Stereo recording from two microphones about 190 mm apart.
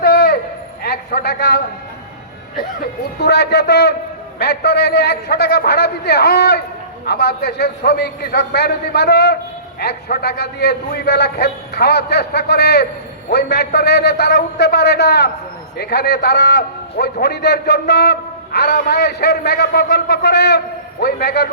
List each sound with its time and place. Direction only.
0.0 s a sound: 55° left (ahead or behind)
0.9 s a man's voice: 60° left (ahead or behind)
3.2 s a man's voice: 60° left (ahead or behind)